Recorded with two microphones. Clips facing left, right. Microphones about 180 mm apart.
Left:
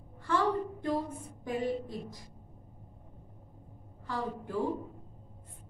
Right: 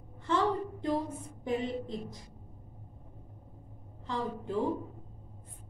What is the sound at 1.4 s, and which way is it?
Speech, 20° right (ahead or behind).